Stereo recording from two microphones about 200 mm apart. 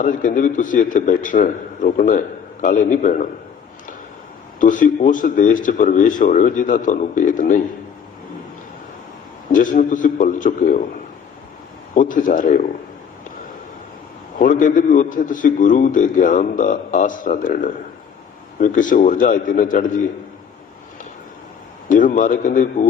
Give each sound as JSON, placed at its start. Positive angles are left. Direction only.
{"t": 0.0, "sound": "a man's voice", "side_deg": 40}
{"t": 4.6, "sound": "a man's voice", "side_deg": 40}
{"t": 9.5, "sound": "a man's voice", "side_deg": 40}
{"t": 11.9, "sound": "a man's voice", "side_deg": 40}
{"t": 14.3, "sound": "a man's voice", "side_deg": 40}
{"t": 21.8, "sound": "a man's voice", "side_deg": 40}